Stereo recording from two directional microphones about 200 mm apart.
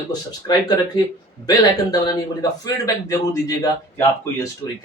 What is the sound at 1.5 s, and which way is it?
A man's voice, 20° left (ahead or behind).